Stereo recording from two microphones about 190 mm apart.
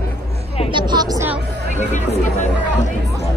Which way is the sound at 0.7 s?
25° right (ahead or behind).